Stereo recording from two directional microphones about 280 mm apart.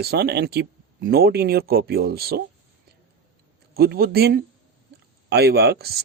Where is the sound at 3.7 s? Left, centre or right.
Right.